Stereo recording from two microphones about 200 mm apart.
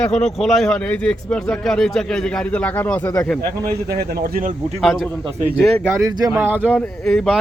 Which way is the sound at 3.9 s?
50° right (ahead or behind).